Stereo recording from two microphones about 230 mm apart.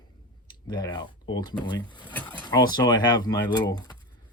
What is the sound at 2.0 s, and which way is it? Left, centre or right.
Mechanisms, centre.